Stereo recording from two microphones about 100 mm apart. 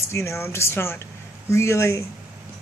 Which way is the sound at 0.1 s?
25° left (ahead or behind).